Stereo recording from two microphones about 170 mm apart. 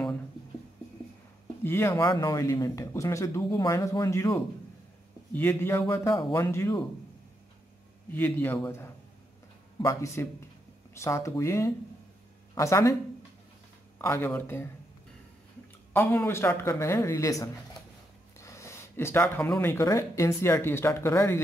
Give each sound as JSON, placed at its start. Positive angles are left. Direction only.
{"t": 1.6, "sound": "a man's voice", "side_deg": 15}
{"t": 8.1, "sound": "a man's voice", "side_deg": 10}
{"t": 13.9, "sound": "a man's voice", "side_deg": 10}
{"t": 15.9, "sound": "a man's voice", "side_deg": 10}